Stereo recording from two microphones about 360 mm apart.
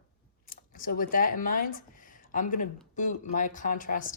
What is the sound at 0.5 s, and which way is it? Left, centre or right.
Speech, left.